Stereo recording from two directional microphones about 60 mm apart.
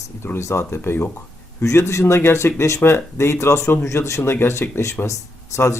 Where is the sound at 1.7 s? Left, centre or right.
Left.